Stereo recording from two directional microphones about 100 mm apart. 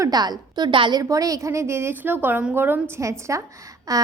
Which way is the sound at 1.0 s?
35° right (ahead or behind).